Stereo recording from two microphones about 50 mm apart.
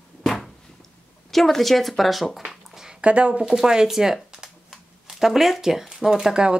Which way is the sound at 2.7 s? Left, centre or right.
Centre.